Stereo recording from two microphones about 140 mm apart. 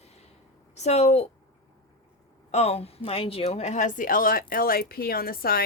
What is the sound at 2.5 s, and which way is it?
A woman's voice, 50° left (ahead or behind).